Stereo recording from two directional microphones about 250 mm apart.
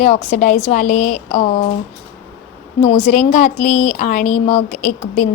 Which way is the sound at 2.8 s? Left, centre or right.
Left.